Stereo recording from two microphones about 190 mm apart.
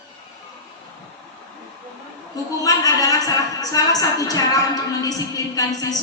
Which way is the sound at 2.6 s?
20° left (ahead or behind).